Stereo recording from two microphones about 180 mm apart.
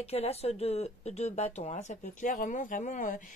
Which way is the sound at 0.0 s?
35° left (ahead or behind).